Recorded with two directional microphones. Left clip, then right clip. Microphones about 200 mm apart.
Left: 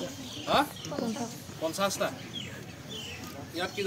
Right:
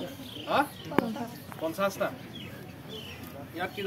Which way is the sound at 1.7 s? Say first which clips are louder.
Even; centre (ahead or behind).